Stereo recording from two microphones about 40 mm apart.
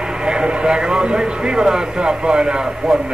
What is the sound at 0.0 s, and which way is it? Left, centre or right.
Speech, centre.